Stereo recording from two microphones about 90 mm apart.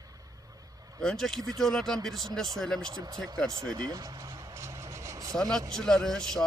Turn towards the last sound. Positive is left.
turn(degrees=5)  # may be behind; listen again after turning